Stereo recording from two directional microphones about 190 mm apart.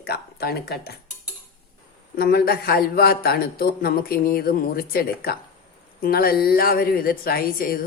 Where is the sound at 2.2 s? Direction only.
55° left (ahead or behind).